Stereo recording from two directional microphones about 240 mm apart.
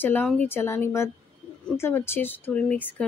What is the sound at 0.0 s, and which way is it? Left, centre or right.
Speech, centre.